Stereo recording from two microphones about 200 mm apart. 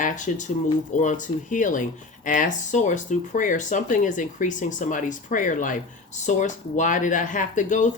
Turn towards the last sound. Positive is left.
turn(degrees=40)  # may be behind; listen again after turning